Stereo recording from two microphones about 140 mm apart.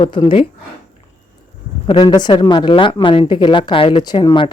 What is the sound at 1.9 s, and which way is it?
Speech, 35° left (ahead or behind).